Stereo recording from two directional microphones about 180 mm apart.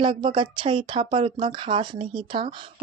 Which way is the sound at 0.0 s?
25° right (ahead or behind).